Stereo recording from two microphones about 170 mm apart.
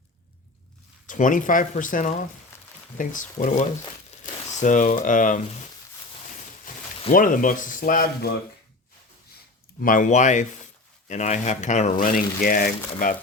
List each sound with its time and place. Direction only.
1.0 s speech: 50° left (ahead or behind)
6.7 s a sound: 50° left (ahead or behind)
7.1 s speech: 50° left (ahead or behind)
9.8 s speech: 50° left (ahead or behind)
12.0 s speech: 55° left (ahead or behind)